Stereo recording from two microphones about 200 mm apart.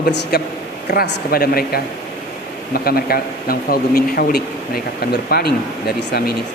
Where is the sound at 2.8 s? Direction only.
50° left (ahead or behind).